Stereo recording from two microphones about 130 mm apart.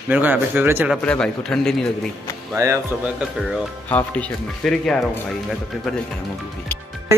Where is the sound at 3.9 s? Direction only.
10° left (ahead or behind).